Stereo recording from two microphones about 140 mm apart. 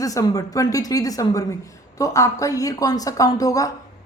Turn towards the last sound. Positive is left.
turn(degrees=25)  # may be behind; listen again after turning